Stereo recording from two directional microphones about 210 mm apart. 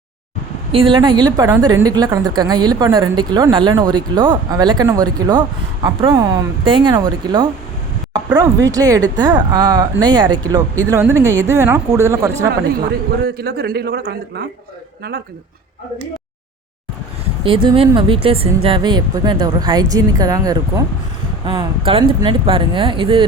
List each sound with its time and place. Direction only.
0.7 s a woman's voice: 25° right (ahead or behind)
13.2 s speech: 50° right (ahead or behind)
17.4 s a woman's voice: 25° right (ahead or behind)